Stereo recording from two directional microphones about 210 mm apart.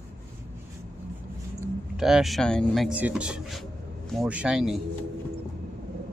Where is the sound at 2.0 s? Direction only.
Centre (ahead or behind).